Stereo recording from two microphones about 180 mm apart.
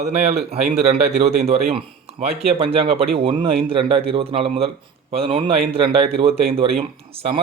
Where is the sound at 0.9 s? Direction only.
35° right (ahead or behind).